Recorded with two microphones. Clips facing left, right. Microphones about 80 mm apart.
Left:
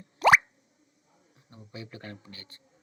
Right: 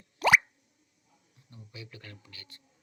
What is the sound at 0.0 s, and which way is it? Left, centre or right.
Plop, left.